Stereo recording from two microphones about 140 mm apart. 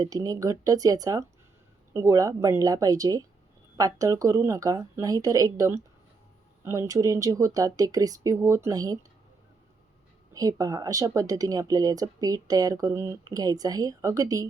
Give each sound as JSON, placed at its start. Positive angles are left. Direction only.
{"t": 0.0, "sound": "speech", "side_deg": -25}
{"t": 10.3, "sound": "speech", "side_deg": -25}